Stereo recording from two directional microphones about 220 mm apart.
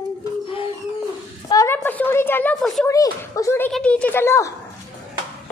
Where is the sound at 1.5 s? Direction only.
10° left (ahead or behind).